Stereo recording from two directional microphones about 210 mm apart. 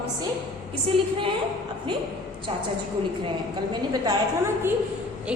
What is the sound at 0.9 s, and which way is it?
Speech, centre (ahead or behind).